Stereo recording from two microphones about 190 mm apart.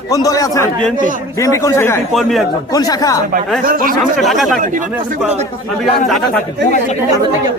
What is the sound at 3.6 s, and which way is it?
Speech, 50° right (ahead or behind).